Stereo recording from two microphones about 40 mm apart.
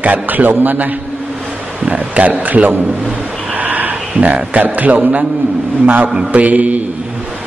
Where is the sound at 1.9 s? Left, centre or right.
Right.